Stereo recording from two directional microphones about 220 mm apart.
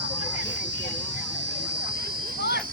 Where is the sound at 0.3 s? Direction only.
55° right (ahead or behind).